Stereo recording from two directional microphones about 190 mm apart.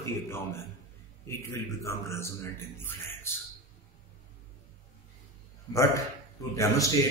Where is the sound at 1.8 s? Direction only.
15° left (ahead or behind).